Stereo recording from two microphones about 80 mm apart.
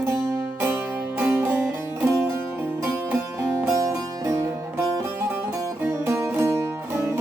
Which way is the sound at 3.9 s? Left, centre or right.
Right.